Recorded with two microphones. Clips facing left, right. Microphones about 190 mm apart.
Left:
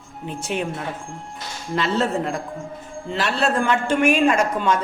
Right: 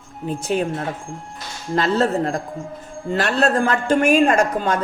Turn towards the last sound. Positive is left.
turn(degrees=-40)  # may be behind; listen again after turning